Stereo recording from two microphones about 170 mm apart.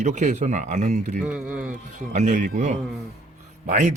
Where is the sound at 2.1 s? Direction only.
45° right (ahead or behind).